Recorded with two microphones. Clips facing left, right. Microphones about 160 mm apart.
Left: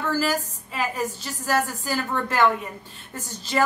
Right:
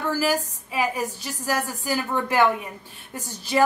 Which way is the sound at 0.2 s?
10° right (ahead or behind).